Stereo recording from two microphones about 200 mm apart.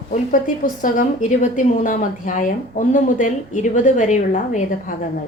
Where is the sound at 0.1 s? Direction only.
40° left (ahead or behind).